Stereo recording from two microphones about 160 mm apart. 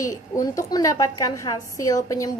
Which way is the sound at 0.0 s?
20° left (ahead or behind).